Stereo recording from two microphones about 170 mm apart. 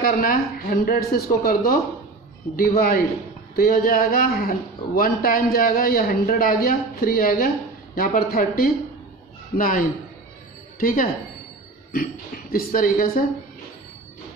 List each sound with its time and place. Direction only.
0.0 s speech: 60° left (ahead or behind)